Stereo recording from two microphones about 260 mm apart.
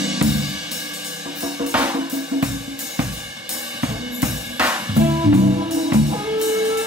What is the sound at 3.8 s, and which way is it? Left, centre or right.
Drum kit, centre.